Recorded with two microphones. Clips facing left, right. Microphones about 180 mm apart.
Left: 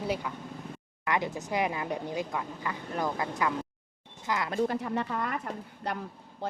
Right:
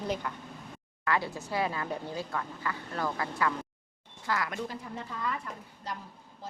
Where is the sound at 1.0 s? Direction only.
20° left (ahead or behind).